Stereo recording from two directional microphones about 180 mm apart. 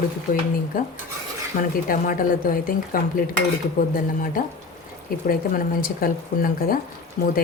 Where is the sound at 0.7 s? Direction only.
50° left (ahead or behind).